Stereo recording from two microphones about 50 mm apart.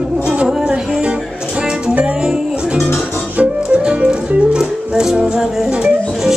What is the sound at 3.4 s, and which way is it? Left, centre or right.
Music, right.